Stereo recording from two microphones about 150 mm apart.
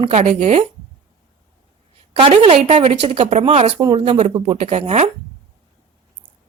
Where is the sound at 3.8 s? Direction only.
35° right (ahead or behind).